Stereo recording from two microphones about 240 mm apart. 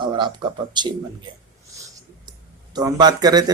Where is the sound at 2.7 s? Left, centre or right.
Centre.